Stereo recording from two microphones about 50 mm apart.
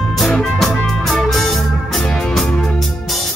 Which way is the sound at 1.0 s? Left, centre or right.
Centre.